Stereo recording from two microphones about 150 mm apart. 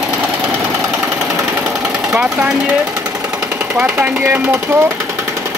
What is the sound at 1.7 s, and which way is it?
Engine, centre (ahead or behind).